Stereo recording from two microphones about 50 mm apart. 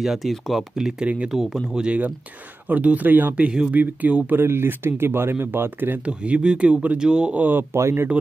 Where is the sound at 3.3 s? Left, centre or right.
Right.